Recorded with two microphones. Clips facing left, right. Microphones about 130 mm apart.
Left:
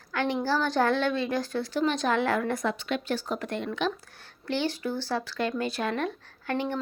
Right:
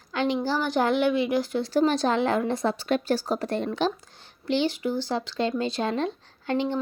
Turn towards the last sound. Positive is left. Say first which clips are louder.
# right 3 dB
turn(degrees=-20)  # may be behind; listen again after turning